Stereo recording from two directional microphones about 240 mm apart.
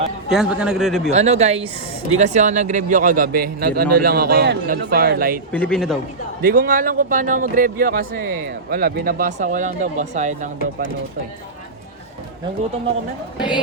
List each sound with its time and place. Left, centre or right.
0.3 s a man's voice: centre
1.1 s speech: right
5.5 s a man's voice: centre
6.4 s speech: right